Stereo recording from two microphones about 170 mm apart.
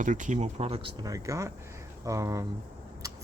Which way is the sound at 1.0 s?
20° right (ahead or behind).